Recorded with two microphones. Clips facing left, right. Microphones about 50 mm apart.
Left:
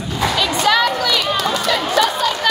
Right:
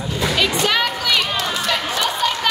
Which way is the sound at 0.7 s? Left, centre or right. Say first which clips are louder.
Left 4 dB; centre.